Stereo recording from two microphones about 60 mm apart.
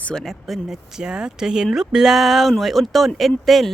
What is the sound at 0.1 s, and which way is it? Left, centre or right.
Speech, centre.